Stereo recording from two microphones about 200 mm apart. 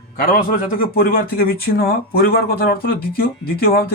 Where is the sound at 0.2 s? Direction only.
45° left (ahead or behind).